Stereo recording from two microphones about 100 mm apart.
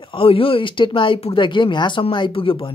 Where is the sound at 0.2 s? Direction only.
65° left (ahead or behind).